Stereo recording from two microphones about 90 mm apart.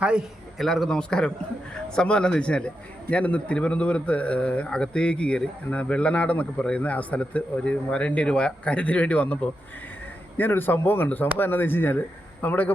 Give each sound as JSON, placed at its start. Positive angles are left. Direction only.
{"t": 0.0, "sound": "a man's voice", "side_deg": -10}
{"t": 0.6, "sound": "a man's voice", "side_deg": 5}